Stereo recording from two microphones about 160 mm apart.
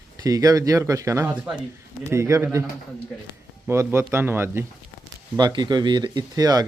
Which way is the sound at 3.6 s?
15° right (ahead or behind).